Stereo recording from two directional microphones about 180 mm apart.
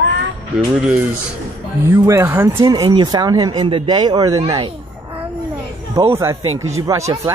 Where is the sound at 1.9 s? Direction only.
15° right (ahead or behind).